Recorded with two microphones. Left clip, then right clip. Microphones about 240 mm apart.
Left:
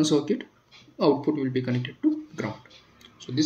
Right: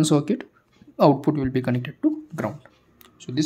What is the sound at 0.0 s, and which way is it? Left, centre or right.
Speech, right.